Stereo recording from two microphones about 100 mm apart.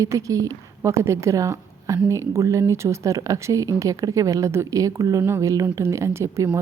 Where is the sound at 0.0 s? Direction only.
30° right (ahead or behind).